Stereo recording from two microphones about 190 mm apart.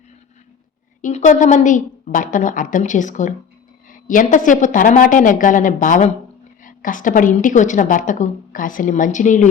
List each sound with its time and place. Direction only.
1.0 s a woman's voice: 40° left (ahead or behind)